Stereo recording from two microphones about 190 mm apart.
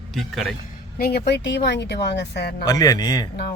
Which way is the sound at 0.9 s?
55° left (ahead or behind).